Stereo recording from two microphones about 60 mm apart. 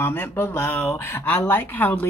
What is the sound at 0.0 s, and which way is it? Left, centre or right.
Speech, left.